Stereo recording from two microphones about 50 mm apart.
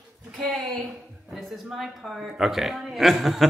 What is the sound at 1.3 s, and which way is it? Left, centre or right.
Speech, centre.